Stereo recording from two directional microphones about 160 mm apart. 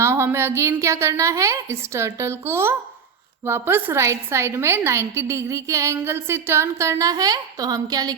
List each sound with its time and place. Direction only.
0.0 s a woman's voice: 15° right (ahead or behind)